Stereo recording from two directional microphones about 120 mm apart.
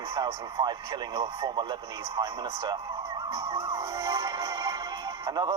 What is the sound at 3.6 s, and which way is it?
Speech, 25° right (ahead or behind).